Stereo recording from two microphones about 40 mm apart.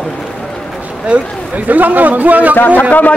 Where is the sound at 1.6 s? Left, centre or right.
Right.